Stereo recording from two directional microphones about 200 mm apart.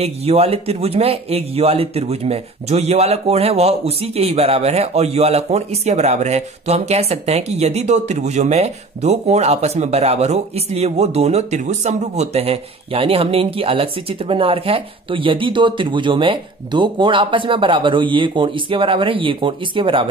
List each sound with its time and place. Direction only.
0.0 s speech: 30° right (ahead or behind)